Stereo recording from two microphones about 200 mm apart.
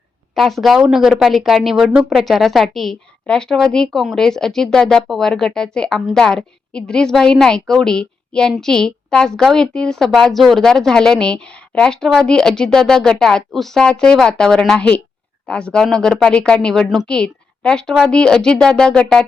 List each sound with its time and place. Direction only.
0.3 s speech: centre (ahead or behind)